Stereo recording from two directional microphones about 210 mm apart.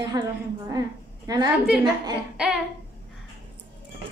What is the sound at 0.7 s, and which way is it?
Speech, 15° right (ahead or behind).